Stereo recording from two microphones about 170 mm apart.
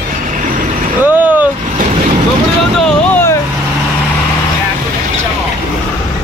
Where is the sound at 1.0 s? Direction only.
10° right (ahead or behind).